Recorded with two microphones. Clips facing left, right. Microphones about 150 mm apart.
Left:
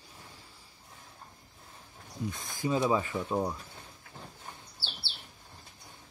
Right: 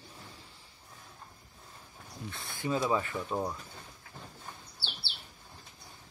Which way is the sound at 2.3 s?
15° left (ahead or behind).